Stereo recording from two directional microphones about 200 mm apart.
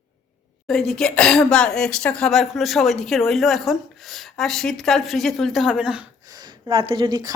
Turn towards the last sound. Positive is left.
turn(degrees=-20)  # may be behind; listen again after turning